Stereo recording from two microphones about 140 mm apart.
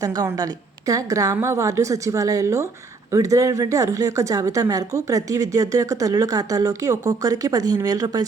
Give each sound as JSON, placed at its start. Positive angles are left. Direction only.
{"t": 0.0, "sound": "speech", "side_deg": -30}